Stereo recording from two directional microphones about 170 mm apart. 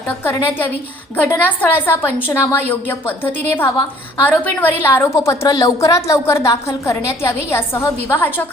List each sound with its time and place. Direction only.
0.3 s a woman's voice: 10° left (ahead or behind)